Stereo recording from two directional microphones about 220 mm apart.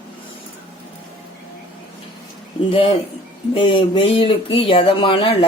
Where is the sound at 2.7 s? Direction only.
25° left (ahead or behind).